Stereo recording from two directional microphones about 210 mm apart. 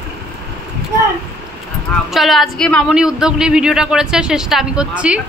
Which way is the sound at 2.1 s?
Centre (ahead or behind).